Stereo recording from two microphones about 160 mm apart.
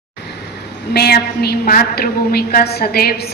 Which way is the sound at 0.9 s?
80° left.